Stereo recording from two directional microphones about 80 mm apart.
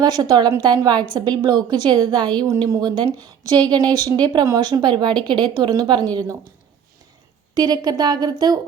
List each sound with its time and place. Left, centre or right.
0.0 s a woman's voice: right
3.2 s a woman's voice: right
7.5 s speech: right